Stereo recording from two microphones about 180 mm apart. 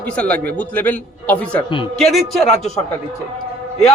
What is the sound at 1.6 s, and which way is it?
Speech, 25° left (ahead or behind).